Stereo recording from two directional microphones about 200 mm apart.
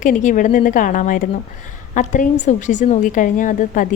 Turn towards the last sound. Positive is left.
turn(degrees=40)  # may be behind; listen again after turning